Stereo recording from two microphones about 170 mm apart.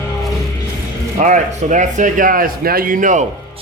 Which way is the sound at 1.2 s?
45° right (ahead or behind).